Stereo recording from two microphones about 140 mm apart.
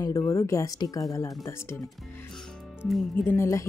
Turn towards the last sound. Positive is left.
turn(degrees=20)  # may be behind; listen again after turning